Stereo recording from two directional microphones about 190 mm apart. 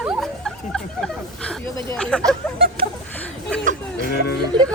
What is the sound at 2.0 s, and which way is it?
Speech, 5° left (ahead or behind).